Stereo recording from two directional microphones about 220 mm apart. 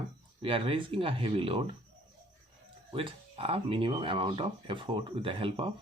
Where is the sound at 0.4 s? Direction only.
25° right (ahead or behind).